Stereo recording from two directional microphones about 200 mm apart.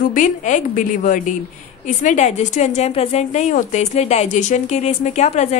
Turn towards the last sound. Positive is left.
turn(degrees=35)  # may be behind; listen again after turning